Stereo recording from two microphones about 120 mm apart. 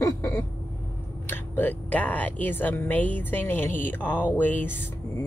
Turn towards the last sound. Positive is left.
turn(degrees=15)  # may be behind; listen again after turning